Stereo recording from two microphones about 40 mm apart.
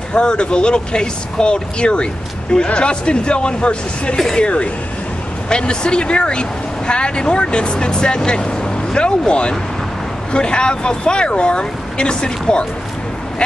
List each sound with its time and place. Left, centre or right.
0.1 s speech: left